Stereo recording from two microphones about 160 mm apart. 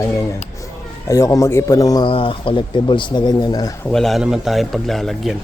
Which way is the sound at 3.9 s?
Centre (ahead or behind).